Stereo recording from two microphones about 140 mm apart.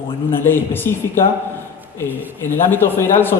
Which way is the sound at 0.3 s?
15° left (ahead or behind).